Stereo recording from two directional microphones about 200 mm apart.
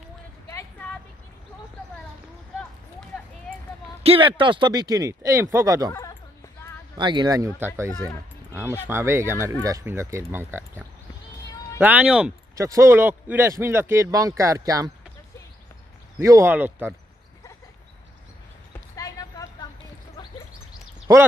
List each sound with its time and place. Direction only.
0.5 s a sound: 15° left (ahead or behind)
4.0 s speech: 25° right (ahead or behind)
7.0 s a man's voice: 20° right (ahead or behind)
7.9 s speech: 15° left (ahead or behind)
8.5 s a man's voice: 10° right (ahead or behind)
11.8 s a man's voice: 5° right (ahead or behind)
16.2 s a man's voice: 15° right (ahead or behind)
18.9 s a sound: 15° left (ahead or behind)